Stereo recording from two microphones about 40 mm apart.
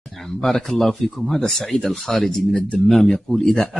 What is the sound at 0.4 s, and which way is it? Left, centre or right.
Speech, centre.